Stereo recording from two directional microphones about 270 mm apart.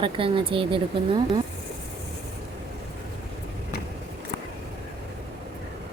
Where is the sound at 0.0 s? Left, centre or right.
Centre.